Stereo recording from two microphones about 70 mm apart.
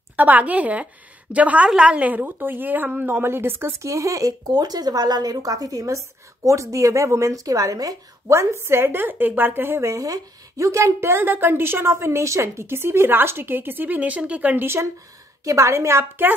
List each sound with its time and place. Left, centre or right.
0.1 s a woman's voice: right
3.8 s a woman's voice: right
9.8 s a woman's voice: right
15.4 s a woman's voice: right